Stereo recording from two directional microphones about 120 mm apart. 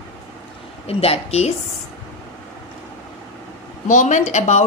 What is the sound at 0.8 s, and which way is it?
Speech, 55° left (ahead or behind).